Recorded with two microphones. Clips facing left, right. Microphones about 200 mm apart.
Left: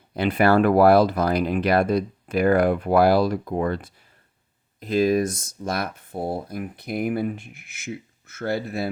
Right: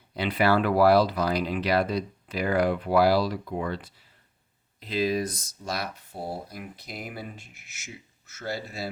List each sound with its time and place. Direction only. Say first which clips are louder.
0.1 s speech: left 5 dB; 50° left (ahead or behind)